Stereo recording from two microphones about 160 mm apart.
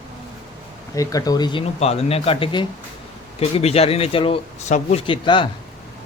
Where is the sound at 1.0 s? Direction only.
20° left (ahead or behind).